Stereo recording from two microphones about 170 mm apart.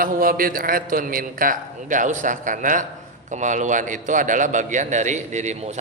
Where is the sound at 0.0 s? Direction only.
55° right (ahead or behind).